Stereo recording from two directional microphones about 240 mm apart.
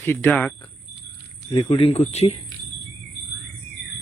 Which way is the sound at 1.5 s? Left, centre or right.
Left.